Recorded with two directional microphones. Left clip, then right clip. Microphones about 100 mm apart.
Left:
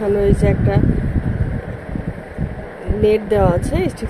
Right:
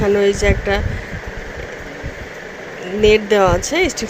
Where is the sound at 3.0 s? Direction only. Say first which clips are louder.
Right 3 dB; 5° right (ahead or behind).